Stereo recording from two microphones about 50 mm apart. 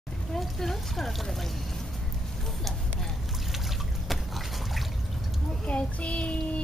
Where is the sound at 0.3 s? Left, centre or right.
Centre.